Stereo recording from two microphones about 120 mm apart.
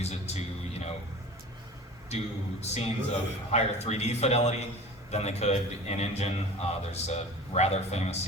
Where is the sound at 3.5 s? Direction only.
65° left (ahead or behind).